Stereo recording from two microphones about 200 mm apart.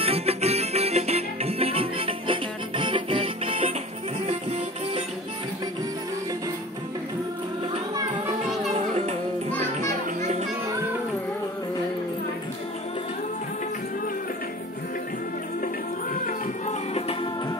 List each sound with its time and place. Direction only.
0.0 s music: 30° right (ahead or behind)
9.5 s music: 10° left (ahead or behind)
16.3 s music: 35° left (ahead or behind)